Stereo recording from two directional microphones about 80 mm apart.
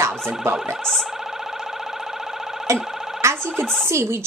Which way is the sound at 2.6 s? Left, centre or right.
Right.